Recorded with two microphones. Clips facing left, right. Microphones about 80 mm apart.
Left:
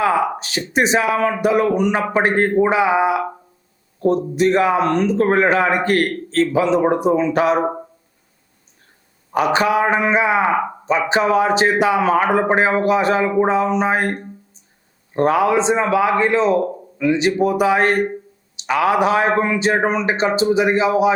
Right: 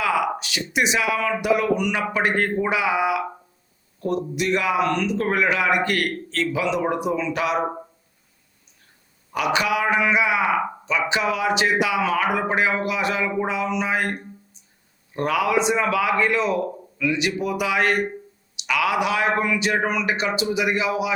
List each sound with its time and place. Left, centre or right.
0.0 s a man's voice: left
9.3 s a man's voice: left